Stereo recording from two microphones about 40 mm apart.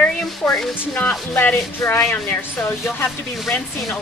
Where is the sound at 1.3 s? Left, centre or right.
Left.